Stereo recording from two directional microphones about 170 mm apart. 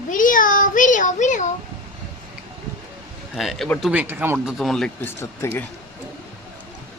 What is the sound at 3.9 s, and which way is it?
Speech, 10° right (ahead or behind).